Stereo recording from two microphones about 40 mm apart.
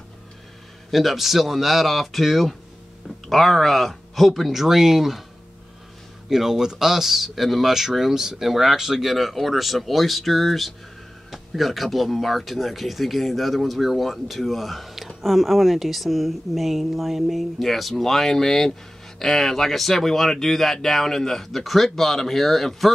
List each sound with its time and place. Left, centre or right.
0.9 s speech: centre
6.2 s speech: centre